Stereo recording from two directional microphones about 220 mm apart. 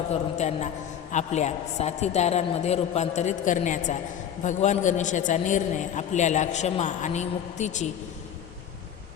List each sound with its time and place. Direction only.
0.1 s a man's voice: 30° left (ahead or behind)